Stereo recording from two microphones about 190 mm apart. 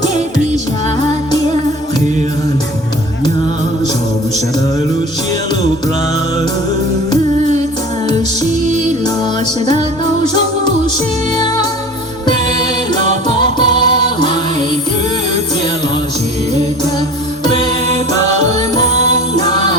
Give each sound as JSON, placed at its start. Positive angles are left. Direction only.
{"t": 8.7, "sound": "music", "side_deg": -40}
{"t": 13.4, "sound": "music", "side_deg": 25}
{"t": 18.8, "sound": "music", "side_deg": -35}
{"t": 19.4, "sound": "music", "side_deg": 20}